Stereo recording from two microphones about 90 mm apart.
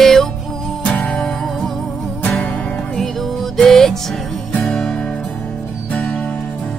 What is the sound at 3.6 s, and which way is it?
Music, 5° left (ahead or behind).